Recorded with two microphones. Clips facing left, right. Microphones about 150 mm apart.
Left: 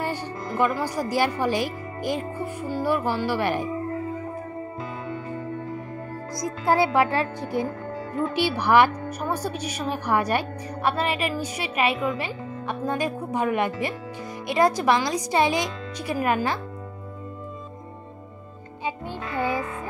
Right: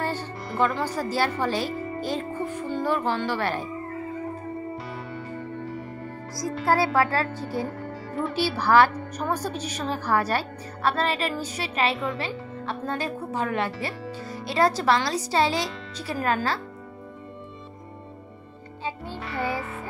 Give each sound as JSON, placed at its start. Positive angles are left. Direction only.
{"t": 0.0, "sound": "speech", "side_deg": 15}
{"t": 6.3, "sound": "a woman's voice", "side_deg": 20}
{"t": 18.9, "sound": "music", "side_deg": 15}